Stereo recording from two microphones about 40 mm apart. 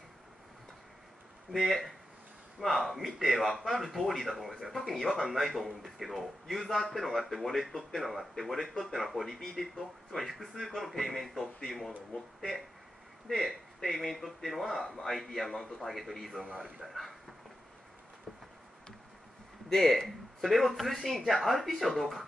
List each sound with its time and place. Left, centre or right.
1.5 s a man's voice: centre
16.4 s a man's voice: right
16.8 s a man's voice: centre
19.7 s a man's voice: centre